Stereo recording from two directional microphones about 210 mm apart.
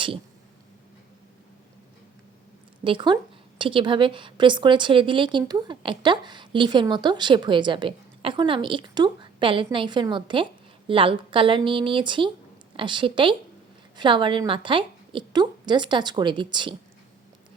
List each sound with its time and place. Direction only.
2.8 s a woman's voice: 25° right (ahead or behind)